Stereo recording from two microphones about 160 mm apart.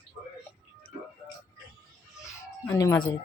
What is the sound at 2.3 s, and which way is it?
Music, 20° left (ahead or behind).